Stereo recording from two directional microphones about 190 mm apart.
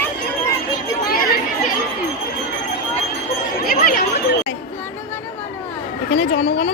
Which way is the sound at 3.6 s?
50° left (ahead or behind).